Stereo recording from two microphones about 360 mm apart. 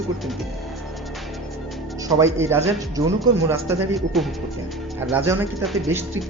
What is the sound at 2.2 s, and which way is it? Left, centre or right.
Speech, centre.